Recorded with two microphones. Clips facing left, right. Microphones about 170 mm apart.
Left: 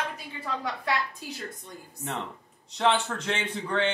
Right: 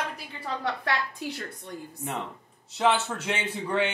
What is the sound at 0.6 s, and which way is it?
A woman's voice, 70° right (ahead or behind).